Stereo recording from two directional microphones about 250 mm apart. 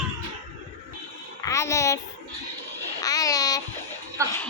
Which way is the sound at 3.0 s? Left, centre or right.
Centre.